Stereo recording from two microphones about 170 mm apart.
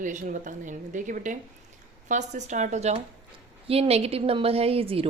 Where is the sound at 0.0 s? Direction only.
50° right (ahead or behind).